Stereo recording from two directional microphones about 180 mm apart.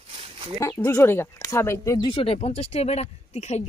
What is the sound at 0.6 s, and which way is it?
Speech, 15° left (ahead or behind).